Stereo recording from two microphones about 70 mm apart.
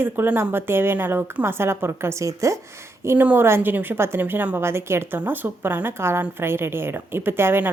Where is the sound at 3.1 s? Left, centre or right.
Right.